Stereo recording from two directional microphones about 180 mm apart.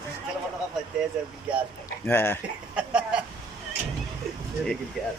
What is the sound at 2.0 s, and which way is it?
Speech, 10° left (ahead or behind).